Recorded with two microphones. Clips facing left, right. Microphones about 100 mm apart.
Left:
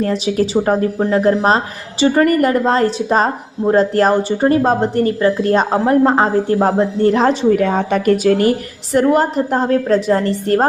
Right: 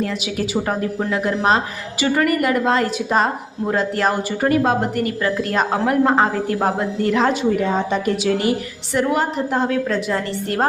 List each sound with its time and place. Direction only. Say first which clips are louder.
0.0 s a woman's voice: left 7 dB; 35° left (ahead or behind)
7.6 s a woman's voice: left 4 dB; 55° left (ahead or behind); by 10.7 s 40° left (ahead or behind)